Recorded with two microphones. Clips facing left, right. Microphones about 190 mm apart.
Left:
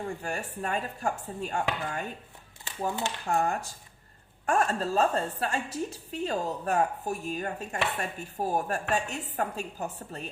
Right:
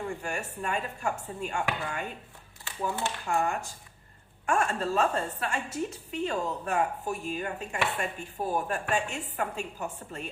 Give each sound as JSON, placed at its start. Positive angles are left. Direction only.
{"t": 0.2, "sound": "a woman's voice", "side_deg": 35}